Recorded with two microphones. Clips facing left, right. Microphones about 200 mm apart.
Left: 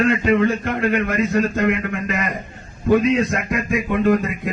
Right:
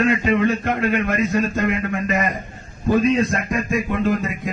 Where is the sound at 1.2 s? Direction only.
60° left (ahead or behind).